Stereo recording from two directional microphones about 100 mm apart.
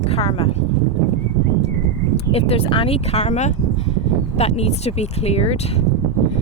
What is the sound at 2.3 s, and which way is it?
Speech, 85° left.